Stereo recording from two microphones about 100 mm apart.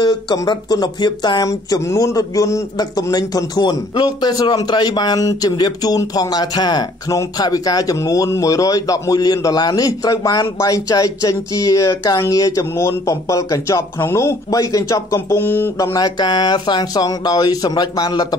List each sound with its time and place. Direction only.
0.0 s speech: 45° left (ahead or behind)
1.5 s a man's voice: 35° left (ahead or behind)
15.8 s a man's voice: 40° left (ahead or behind)